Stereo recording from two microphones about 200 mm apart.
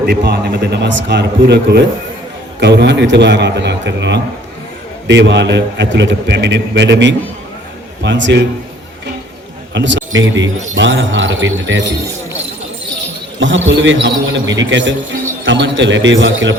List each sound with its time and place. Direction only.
0.0 s a man's voice: 55° right (ahead or behind)
9.7 s speech: 65° right (ahead or behind)
13.4 s a man's voice: 65° right (ahead or behind)